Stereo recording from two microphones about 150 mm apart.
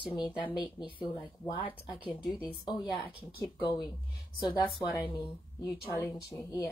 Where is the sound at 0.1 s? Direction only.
30° left (ahead or behind).